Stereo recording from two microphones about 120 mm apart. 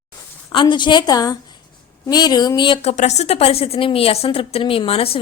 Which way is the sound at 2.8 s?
65° left (ahead or behind).